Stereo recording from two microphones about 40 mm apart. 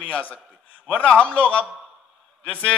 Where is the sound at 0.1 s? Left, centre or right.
Left.